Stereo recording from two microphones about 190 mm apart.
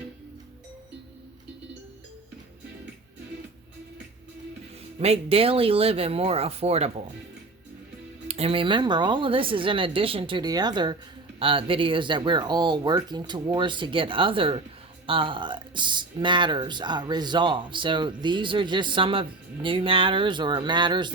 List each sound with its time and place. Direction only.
4.9 s speech: 30° right (ahead or behind)
8.3 s speech: 30° right (ahead or behind)